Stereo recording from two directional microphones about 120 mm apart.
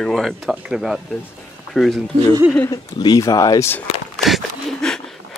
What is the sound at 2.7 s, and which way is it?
Speech, 35° left (ahead or behind).